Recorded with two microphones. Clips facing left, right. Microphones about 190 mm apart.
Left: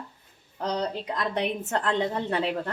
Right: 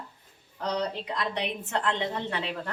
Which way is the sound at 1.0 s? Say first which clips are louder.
Left 3 dB; 45° left (ahead or behind).